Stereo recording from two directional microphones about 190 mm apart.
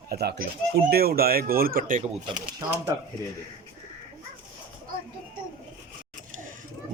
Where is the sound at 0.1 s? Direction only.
55° right (ahead or behind).